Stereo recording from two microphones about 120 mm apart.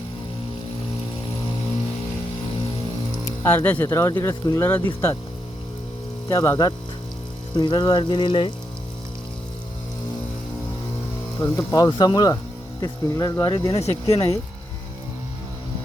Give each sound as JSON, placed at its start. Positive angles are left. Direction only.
{"t": 3.4, "sound": "speech", "side_deg": 15}
{"t": 6.2, "sound": "music", "side_deg": 30}
{"t": 11.3, "sound": "speech", "side_deg": 25}
{"t": 11.7, "sound": "music", "side_deg": 35}
{"t": 13.7, "sound": "speech", "side_deg": 60}